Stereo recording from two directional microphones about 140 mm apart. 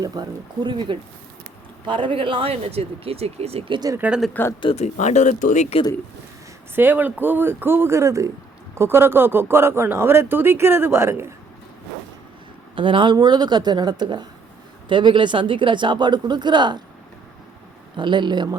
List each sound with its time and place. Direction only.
0.0 s speech: 30° right (ahead or behind); by 3.8 s 45° right (ahead or behind)
3.8 s speech: 25° right (ahead or behind)
4.0 s speech: 5° right (ahead or behind)
4.6 s speech: 50° left (ahead or behind)
6.7 s speech: 15° right (ahead or behind)
12.7 s speech: 35° right (ahead or behind)
17.9 s speech: 35° right (ahead or behind)